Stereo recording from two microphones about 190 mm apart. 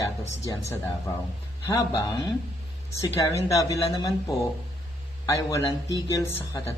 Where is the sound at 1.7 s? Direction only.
20° left (ahead or behind).